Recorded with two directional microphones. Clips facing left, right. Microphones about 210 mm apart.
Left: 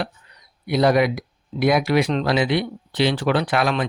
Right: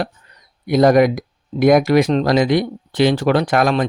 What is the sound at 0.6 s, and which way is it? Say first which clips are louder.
Speech: right 5 dB; 45° right (ahead or behind).